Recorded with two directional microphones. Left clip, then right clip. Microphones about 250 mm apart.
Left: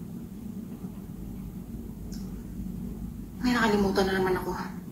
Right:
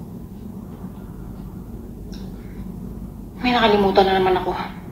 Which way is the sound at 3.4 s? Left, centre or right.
Right.